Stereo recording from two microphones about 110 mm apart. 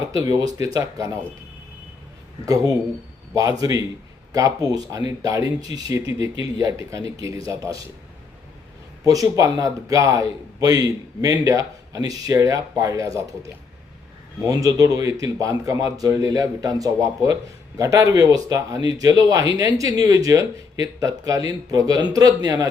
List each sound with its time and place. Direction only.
0.2 s a man's voice: 35° right (ahead or behind)
2.5 s a man's voice: 30° right (ahead or behind)
9.0 s a man's voice: 30° right (ahead or behind)